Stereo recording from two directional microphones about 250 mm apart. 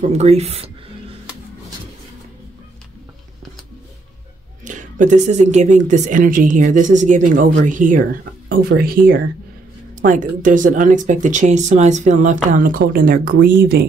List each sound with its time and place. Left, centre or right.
0.0 s speech: right
4.6 s speech: right